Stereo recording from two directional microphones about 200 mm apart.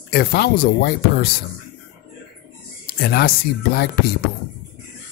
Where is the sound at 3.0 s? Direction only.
50° left (ahead or behind).